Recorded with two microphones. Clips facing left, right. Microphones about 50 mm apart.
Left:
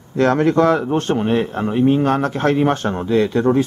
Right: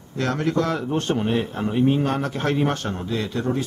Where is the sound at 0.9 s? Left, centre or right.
Centre.